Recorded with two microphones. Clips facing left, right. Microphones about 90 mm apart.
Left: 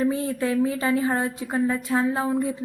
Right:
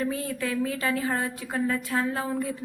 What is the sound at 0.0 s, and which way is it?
A woman's voice, 25° left (ahead or behind).